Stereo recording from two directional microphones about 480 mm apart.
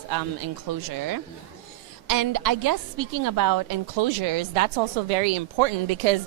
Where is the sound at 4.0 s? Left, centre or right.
Right.